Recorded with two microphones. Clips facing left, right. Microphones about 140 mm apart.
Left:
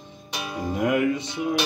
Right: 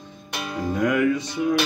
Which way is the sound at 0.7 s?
25° left (ahead or behind).